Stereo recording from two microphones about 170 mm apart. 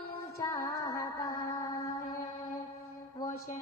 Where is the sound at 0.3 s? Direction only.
20° left (ahead or behind).